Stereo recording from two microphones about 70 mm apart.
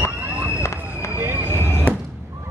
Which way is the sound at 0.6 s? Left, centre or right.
Left.